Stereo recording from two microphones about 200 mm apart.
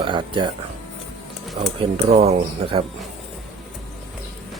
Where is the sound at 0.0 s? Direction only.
25° right (ahead or behind).